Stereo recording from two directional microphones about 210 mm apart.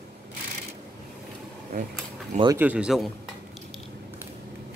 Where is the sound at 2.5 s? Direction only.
5° right (ahead or behind).